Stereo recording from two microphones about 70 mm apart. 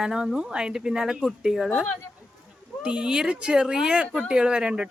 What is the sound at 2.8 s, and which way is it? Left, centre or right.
Speech, centre.